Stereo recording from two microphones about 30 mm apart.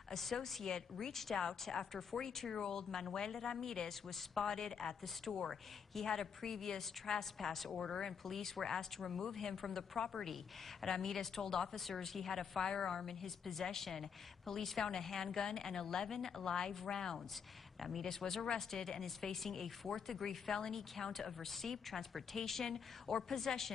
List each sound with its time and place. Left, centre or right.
0.1 s a woman's voice: centre
0.7 s a woman's voice: left
1.1 s a woman's voice: centre
5.3 s a woman's voice: centre
6.0 s a woman's voice: centre
7.3 s a woman's voice: centre
9.9 s a woman's voice: centre
17.7 s speech: centre
18.0 s a woman's voice: centre
20.2 s a woman's voice: centre